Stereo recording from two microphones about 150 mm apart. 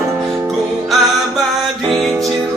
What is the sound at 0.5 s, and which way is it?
Music, centre (ahead or behind).